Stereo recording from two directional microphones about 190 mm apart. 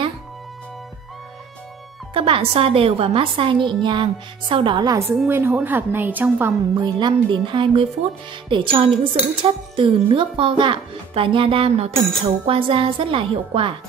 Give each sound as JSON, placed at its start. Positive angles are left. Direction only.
{"t": 2.1, "sound": "a woman's voice", "side_deg": -30}
{"t": 6.8, "sound": "a woman's voice", "side_deg": -25}